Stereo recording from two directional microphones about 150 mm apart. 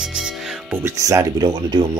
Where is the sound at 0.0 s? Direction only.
5° right (ahead or behind).